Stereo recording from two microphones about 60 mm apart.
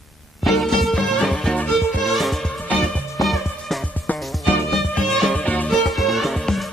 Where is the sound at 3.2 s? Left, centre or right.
Centre.